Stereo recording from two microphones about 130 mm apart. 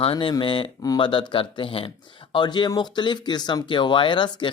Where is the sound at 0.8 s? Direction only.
30° left (ahead or behind).